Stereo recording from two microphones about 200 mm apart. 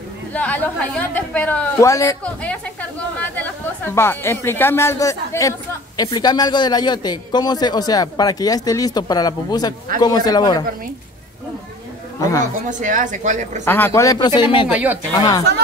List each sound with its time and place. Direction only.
0.3 s a woman's voice: 5° left (ahead or behind)
12.2 s a woman's voice: 15° left (ahead or behind)
12.5 s a woman's voice: 40° right (ahead or behind)
13.7 s speech: 10° left (ahead or behind)
14.7 s speech: 5° right (ahead or behind)